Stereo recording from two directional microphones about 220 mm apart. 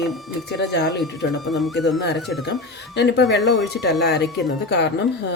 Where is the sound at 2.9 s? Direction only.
50° left (ahead or behind).